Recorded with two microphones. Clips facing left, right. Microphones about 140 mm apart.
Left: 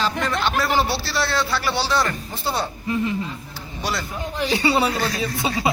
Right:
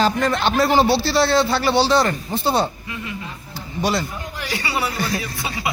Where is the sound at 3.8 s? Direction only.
20° right (ahead or behind).